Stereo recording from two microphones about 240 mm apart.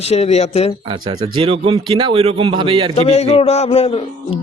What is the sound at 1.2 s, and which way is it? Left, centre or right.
A man's voice, right.